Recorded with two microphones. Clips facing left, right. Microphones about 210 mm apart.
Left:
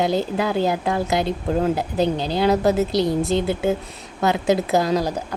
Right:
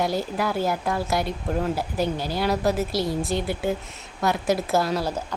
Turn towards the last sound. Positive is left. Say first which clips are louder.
# left 4 dB
turn(degrees=15)  # may be behind; listen again after turning